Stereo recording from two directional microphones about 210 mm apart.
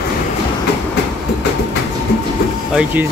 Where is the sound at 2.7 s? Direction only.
5° right (ahead or behind).